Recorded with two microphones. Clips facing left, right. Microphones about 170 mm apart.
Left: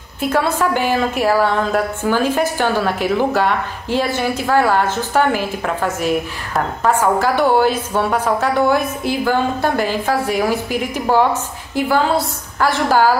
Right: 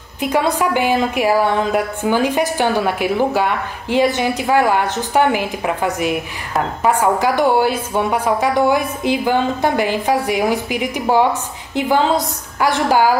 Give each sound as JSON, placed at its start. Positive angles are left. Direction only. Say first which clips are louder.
{"t": 0.2, "sound": "a woman's voice", "louder": "even", "side_deg": -15}